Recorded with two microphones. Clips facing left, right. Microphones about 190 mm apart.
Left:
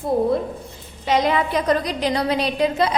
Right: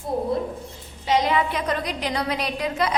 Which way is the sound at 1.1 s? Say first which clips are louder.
Left 2 dB; 40° left (ahead or behind).